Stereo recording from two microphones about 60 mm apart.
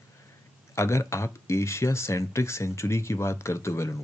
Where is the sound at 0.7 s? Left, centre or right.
Left.